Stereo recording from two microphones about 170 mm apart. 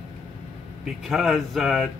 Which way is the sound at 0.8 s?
Centre (ahead or behind).